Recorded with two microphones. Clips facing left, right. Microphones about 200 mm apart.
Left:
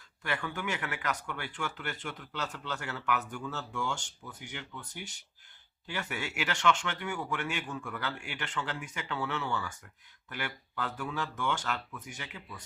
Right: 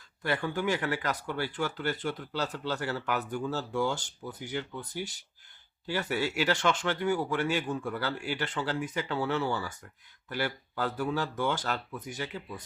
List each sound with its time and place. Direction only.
0.2 s speech: 35° right (ahead or behind)